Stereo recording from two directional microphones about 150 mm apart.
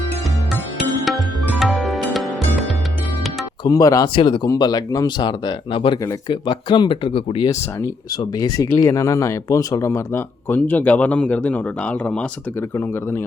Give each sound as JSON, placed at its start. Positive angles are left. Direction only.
{"t": 1.0, "sound": "music", "side_deg": 0}
{"t": 3.6, "sound": "speech", "side_deg": 25}
{"t": 4.1, "sound": "speech", "side_deg": 35}
{"t": 7.8, "sound": "speech", "side_deg": 25}